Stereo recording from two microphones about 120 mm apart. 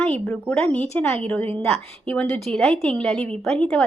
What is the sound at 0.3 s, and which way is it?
A woman's voice, 15° left (ahead or behind).